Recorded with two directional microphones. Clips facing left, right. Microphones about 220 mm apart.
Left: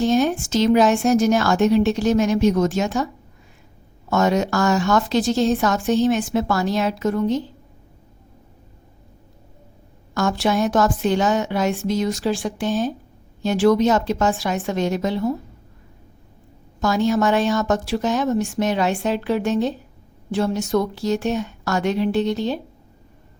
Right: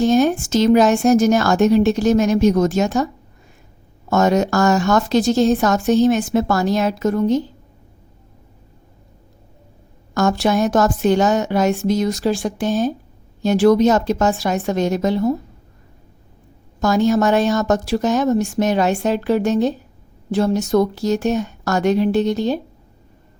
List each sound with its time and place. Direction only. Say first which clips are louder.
0.0 s speech: right 3 dB; 45° right (ahead or behind)
4.1 s speech: right 3 dB; 45° right (ahead or behind)
10.2 s a woman's voice: right 3 dB; 45° right (ahead or behind)
16.8 s speech: right 3 dB; 45° right (ahead or behind)